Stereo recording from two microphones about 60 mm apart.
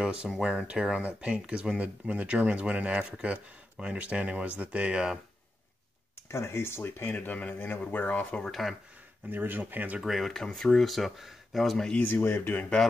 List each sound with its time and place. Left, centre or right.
0.0 s speech: centre
6.3 s speech: left
7.2 s speech: left
8.5 s speech: centre
9.3 s speech: right
9.9 s speech: centre
12.0 s speech: left